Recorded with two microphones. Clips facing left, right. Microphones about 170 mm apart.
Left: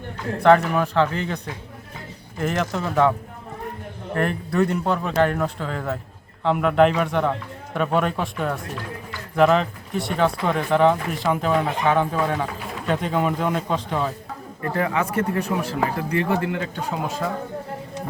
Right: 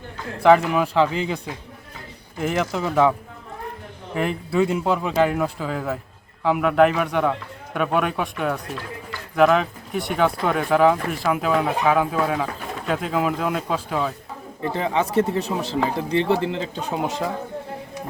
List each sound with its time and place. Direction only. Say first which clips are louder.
0.4 s speech: right 1 dB; 10° right (ahead or behind)
2.4 s speech: right 1 dB; 5° right (ahead or behind)
14.7 s speech: even; 20° right (ahead or behind)